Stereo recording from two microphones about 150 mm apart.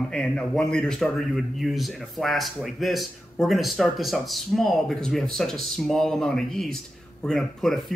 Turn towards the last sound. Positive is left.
turn(degrees=5)  # may be behind; listen again after turning